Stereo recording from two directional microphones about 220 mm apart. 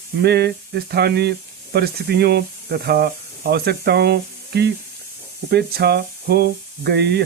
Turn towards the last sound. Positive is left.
turn(degrees=-50)  # may be behind; listen again after turning